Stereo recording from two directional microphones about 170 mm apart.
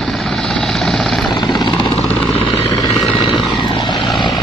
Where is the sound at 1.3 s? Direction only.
25° left (ahead or behind).